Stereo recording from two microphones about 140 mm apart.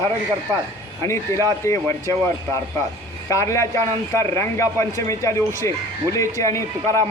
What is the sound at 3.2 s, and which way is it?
A man's voice, 20° left (ahead or behind).